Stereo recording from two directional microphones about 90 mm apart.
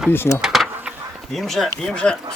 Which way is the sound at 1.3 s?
Centre (ahead or behind).